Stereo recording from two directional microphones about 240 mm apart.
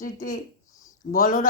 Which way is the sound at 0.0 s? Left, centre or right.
Left.